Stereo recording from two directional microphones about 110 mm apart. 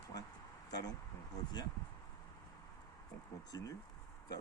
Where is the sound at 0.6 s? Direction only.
35° left (ahead or behind).